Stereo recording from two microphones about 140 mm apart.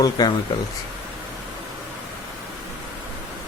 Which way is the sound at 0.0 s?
30° left (ahead or behind).